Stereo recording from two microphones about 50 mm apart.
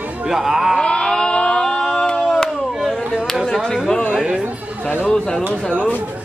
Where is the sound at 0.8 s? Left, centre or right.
Centre.